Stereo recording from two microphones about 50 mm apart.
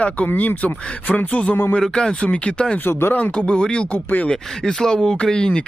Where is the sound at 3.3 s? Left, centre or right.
Centre.